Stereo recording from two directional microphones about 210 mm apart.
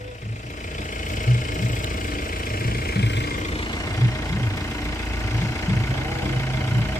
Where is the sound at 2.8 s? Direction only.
50° left (ahead or behind).